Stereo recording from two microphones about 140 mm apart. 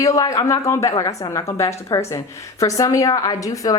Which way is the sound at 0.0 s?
25° left (ahead or behind).